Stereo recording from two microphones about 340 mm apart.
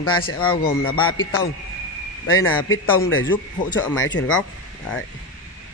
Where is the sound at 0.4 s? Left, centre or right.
Centre.